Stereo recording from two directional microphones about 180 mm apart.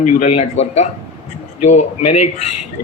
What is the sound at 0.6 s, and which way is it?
Speech, 35° left (ahead or behind).